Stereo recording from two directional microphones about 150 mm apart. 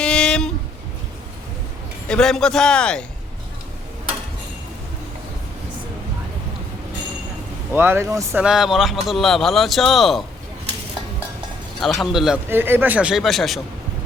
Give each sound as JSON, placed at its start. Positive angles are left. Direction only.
{"t": 0.0, "sound": "a sound", "side_deg": 5}
{"t": 2.0, "sound": "a man's voice", "side_deg": 5}
{"t": 7.7, "sound": "speech", "side_deg": -15}
{"t": 8.4, "sound": "a man's voice", "side_deg": -5}
{"t": 11.8, "sound": "a man's voice", "side_deg": 0}
{"t": 12.5, "sound": "speech", "side_deg": -15}